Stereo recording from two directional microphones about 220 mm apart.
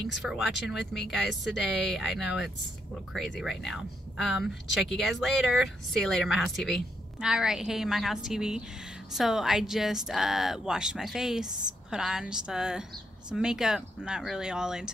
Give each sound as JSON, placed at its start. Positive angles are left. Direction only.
{"t": 0.0, "sound": "speech", "side_deg": 0}